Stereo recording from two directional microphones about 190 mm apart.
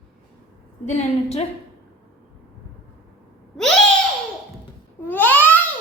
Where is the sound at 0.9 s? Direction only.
35° left (ahead or behind).